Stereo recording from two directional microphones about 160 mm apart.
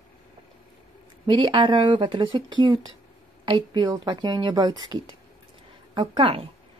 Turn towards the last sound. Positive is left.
turn(degrees=-35)  # may be behind; listen again after turning